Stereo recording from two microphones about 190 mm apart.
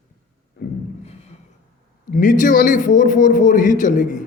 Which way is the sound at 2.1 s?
45° left (ahead or behind).